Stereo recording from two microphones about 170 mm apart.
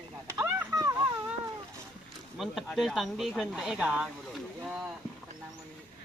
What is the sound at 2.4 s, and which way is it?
Speech, centre (ahead or behind).